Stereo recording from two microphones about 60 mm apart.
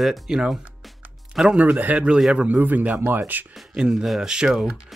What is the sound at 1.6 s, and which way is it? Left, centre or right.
Speech, right.